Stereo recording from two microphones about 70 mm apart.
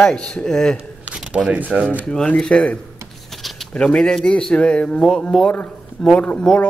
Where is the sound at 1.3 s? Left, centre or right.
Centre.